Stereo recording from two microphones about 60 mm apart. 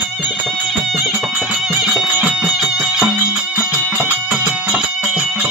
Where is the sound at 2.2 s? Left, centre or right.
Right.